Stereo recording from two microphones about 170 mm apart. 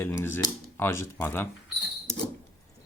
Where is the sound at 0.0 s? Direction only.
15° left (ahead or behind).